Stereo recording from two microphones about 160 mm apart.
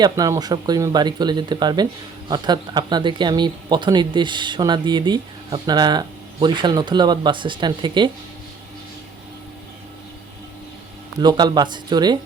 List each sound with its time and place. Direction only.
0.0 s speech: 25° right (ahead or behind)
11.2 s speech: 25° right (ahead or behind)